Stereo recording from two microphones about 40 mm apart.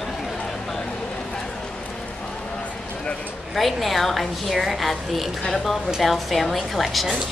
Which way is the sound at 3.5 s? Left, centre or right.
Centre.